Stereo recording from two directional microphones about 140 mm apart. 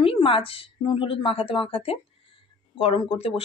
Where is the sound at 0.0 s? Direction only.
40° left (ahead or behind).